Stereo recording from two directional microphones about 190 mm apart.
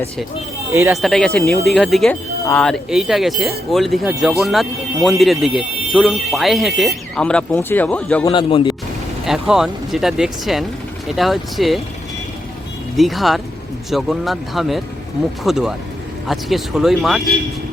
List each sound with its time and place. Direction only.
0.7 s speech: 15° right (ahead or behind)
1.0 s speech: 5° left (ahead or behind)
8.2 s a man's voice: 25° left (ahead or behind)
9.2 s speech: centre (ahead or behind)
13.0 s speech: centre (ahead or behind)